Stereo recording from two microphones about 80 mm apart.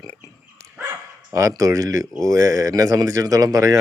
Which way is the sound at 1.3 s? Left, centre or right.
Right.